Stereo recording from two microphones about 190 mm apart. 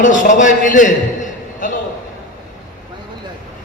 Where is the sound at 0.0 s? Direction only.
45° left (ahead or behind).